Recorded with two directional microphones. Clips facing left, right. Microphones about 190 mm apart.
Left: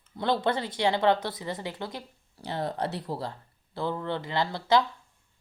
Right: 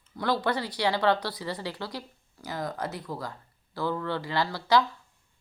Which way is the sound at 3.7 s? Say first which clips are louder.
Right 1 dB; 20° left (ahead or behind).